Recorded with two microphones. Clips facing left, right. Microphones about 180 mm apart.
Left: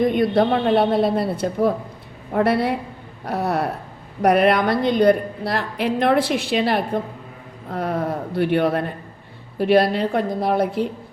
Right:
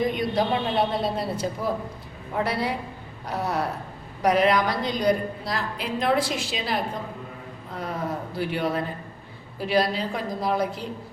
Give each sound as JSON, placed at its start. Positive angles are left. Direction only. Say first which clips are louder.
{"t": 0.0, "sound": "a woman's voice", "louder": "left 7 dB", "side_deg": 55}